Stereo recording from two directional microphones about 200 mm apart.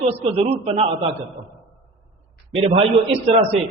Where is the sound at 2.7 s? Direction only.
30° right (ahead or behind).